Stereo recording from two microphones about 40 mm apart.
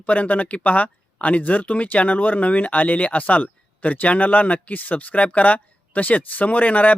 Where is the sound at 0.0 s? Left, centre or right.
Left.